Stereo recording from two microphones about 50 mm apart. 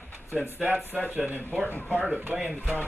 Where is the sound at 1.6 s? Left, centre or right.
Left.